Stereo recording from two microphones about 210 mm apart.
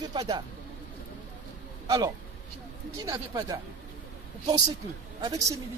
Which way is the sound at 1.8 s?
15° right (ahead or behind).